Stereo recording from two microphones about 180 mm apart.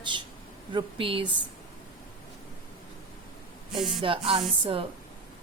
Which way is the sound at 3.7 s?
Centre (ahead or behind).